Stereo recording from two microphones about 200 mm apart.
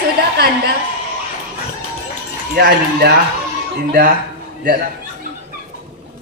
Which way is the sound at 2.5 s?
55° right (ahead or behind).